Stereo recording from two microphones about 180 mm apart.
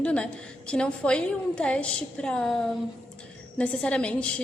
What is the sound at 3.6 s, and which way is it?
Speech, 5° left (ahead or behind).